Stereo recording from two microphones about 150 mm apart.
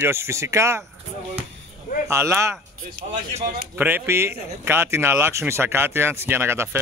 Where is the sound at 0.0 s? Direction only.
15° right (ahead or behind).